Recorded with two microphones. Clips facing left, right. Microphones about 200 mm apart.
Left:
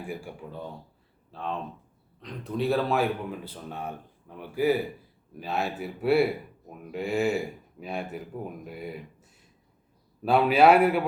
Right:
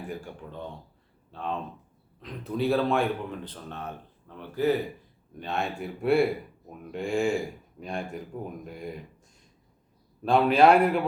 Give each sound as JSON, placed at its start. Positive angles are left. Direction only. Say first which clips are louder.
{"t": 0.0, "sound": "speech", "louder": "left 1 dB", "side_deg": 10}
{"t": 10.2, "sound": "speech", "louder": "even", "side_deg": 5}